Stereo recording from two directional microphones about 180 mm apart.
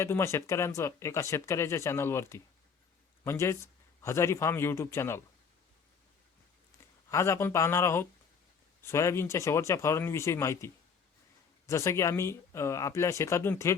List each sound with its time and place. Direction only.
0.0 s speech: 15° left (ahead or behind)
7.1 s speech: 15° left (ahead or behind)